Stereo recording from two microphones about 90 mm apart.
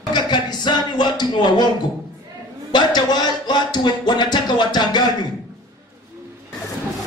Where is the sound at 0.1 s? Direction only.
55° left (ahead or behind).